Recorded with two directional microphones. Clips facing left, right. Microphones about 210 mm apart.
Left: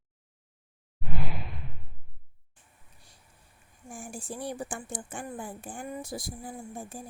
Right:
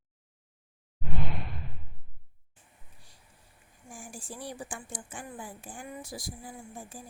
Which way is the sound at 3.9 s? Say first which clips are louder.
Left 4 dB; 45° left (ahead or behind).